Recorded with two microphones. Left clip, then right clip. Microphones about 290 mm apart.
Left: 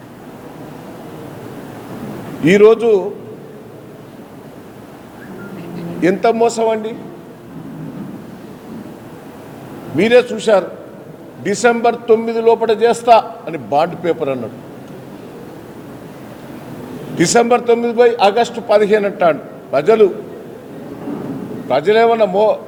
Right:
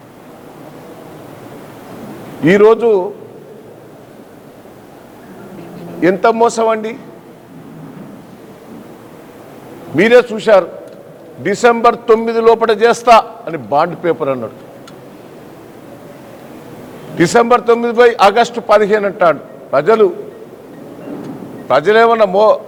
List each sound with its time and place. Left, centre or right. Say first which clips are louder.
2.4 s a man's voice: right 1 dB; right
6.0 s a man's voice: right 3 dB; right
10.0 s a man's voice: right 3 dB; right
17.2 s a man's voice: right 2 dB; right
17.8 s a man's voice: right 4 dB; right
21.7 s a man's voice: right 3 dB; right